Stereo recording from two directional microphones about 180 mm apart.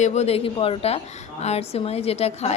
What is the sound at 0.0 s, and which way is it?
A woman's voice, 40° left (ahead or behind).